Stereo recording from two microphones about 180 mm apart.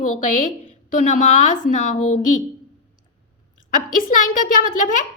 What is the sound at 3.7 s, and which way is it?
A woman's voice, 50° left (ahead or behind).